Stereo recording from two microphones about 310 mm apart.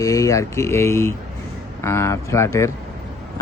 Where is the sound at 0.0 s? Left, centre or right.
Centre.